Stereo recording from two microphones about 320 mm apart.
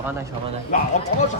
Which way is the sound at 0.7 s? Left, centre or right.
Left.